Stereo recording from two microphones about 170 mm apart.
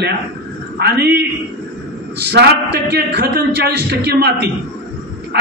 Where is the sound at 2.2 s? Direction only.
75° right (ahead or behind).